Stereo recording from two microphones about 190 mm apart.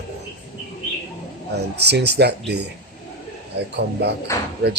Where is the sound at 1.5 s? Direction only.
60° right (ahead or behind).